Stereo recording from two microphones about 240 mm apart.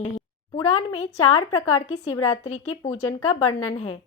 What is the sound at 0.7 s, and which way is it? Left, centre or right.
Speech, left.